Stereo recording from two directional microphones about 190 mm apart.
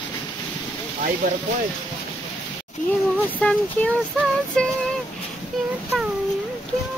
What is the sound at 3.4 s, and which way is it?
Speech, 5° left (ahead or behind).